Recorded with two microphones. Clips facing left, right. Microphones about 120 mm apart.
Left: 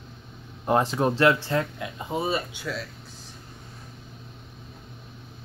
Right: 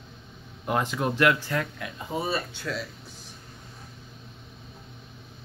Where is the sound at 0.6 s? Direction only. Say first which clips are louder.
Left 4 dB; 30° left (ahead or behind).